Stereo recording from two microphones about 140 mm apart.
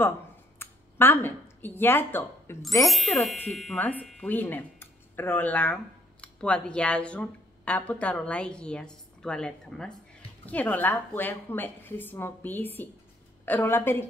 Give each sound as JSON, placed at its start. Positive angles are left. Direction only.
{"t": 0.6, "sound": "speech", "side_deg": 15}
{"t": 2.9, "sound": "speech", "side_deg": 0}
{"t": 3.7, "sound": "speech", "side_deg": 10}